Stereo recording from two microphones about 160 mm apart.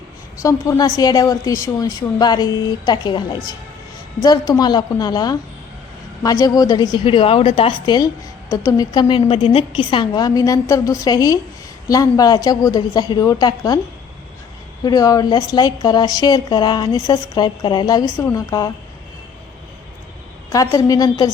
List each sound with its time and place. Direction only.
0.3 s a woman's voice: 20° left (ahead or behind)
14.8 s a woman's voice: 20° left (ahead or behind)
20.5 s a woman's voice: 20° left (ahead or behind)